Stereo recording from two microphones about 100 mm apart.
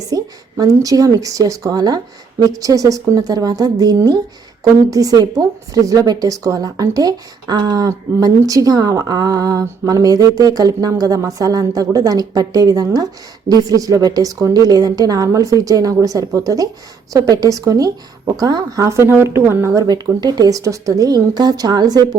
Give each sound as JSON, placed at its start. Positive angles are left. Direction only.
{"t": 0.1, "sound": "speech", "side_deg": -35}